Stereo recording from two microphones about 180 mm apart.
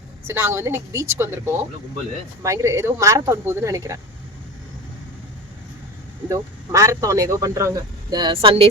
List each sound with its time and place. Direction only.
0.3 s speech: 15° right (ahead or behind)
6.2 s speech: 20° right (ahead or behind)